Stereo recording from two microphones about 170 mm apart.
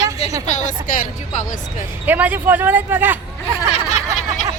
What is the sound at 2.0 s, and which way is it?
Speech, 10° right (ahead or behind).